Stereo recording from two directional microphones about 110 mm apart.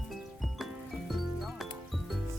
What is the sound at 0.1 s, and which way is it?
Music, centre (ahead or behind).